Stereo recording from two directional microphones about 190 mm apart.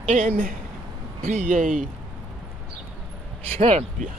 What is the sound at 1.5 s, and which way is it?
Speech, 45° right (ahead or behind).